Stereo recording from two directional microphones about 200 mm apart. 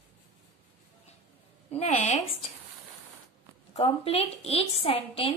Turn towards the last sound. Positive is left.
turn(degrees=25)  # may be behind; listen again after turning